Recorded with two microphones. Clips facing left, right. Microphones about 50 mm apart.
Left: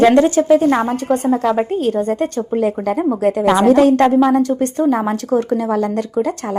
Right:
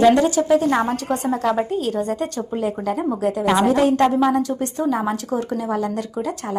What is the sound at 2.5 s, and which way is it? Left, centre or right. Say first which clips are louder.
Speech: left 6 dB; left.